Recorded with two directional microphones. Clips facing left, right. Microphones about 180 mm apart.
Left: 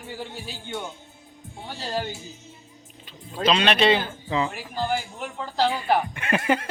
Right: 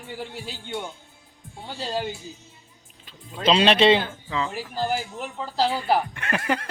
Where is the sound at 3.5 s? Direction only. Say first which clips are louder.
Right 3 dB; 25° right (ahead or behind).